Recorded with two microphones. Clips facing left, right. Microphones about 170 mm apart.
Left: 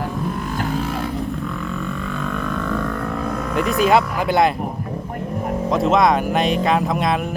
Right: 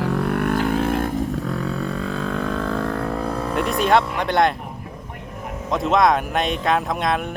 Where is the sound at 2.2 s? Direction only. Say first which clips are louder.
Even; 30° right (ahead or behind).